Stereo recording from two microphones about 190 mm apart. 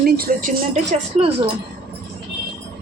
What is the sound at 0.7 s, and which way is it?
Speech, 35° right (ahead or behind).